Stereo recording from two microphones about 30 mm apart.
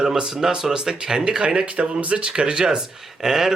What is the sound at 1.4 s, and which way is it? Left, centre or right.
Speech, right.